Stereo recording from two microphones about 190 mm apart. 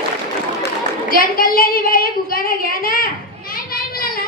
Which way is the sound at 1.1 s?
50° left (ahead or behind).